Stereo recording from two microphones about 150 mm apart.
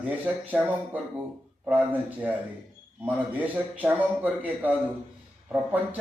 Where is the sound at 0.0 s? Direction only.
10° right (ahead or behind).